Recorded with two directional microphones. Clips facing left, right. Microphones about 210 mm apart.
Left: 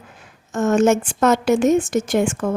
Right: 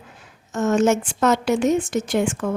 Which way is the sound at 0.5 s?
50° left (ahead or behind).